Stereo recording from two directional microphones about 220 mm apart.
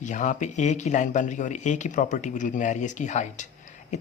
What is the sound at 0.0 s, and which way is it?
Speech, 35° left (ahead or behind).